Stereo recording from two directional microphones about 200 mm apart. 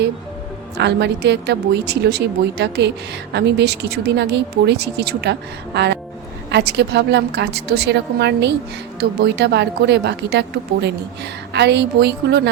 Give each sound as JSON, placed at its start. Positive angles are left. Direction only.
{"t": 0.8, "sound": "speech", "side_deg": -60}